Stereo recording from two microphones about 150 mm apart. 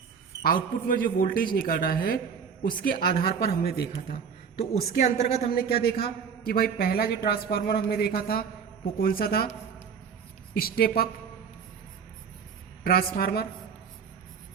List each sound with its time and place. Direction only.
0.4 s a man's voice: 70° left (ahead or behind); by 4.2 s 90° left
4.6 s a woman's voice: 45° left (ahead or behind)
5.5 s a man's voice: 90° left
10.6 s a woman's voice: 85° left
12.8 s a man's voice: 90° left